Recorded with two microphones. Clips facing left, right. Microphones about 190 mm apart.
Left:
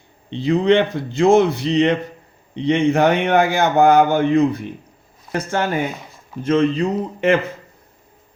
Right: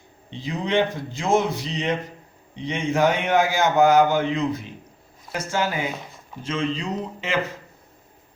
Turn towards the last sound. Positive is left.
turn(degrees=60)  # may be behind; listen again after turning